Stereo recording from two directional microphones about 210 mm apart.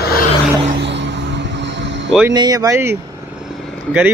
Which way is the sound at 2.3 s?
20° right (ahead or behind).